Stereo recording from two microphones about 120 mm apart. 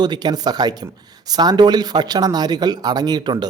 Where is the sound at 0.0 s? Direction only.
35° right (ahead or behind).